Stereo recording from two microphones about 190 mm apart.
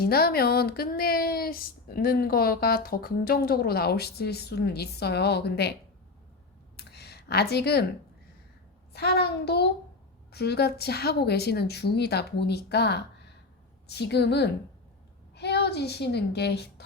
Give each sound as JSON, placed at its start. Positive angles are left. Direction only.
{"t": 0.0, "sound": "speech", "side_deg": 55}
{"t": 6.7, "sound": "a sound", "side_deg": 60}
{"t": 8.9, "sound": "a child's voice", "side_deg": 60}